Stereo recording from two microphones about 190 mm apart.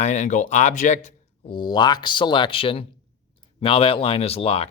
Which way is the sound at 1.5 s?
20° left (ahead or behind).